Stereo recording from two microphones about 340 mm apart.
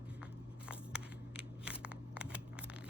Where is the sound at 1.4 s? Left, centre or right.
Centre.